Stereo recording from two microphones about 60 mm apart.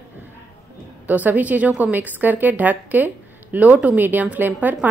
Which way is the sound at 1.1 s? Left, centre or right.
Right.